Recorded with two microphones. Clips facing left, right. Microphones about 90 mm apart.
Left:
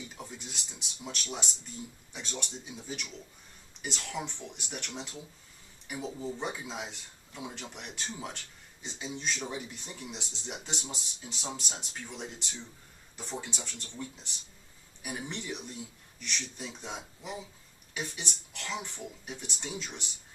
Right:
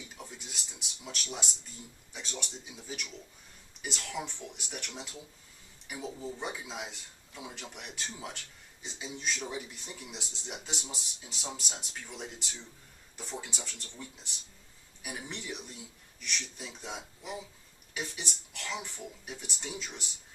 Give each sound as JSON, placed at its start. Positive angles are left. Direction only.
{"t": 0.0, "sound": "speech", "side_deg": 0}